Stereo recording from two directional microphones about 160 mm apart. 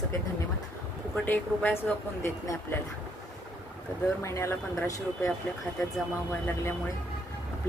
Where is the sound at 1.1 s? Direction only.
10° left (ahead or behind).